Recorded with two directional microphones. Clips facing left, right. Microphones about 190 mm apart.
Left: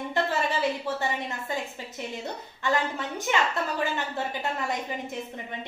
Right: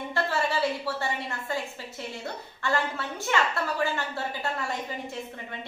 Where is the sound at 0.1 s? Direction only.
20° left (ahead or behind).